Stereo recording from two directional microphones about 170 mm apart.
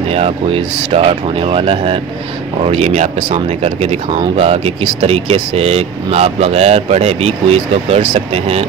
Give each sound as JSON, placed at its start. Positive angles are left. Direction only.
{"t": 0.1, "sound": "speech", "side_deg": -35}